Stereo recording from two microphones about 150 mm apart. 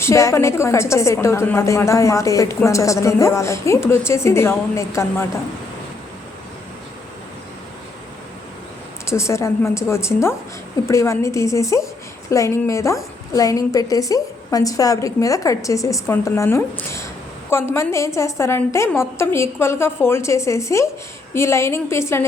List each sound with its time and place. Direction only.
0.0 s a woman's voice: 20° left (ahead or behind)
9.0 s a woman's voice: 20° left (ahead or behind)